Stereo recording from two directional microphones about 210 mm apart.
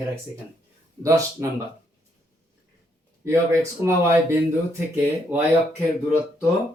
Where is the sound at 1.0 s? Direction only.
15° right (ahead or behind).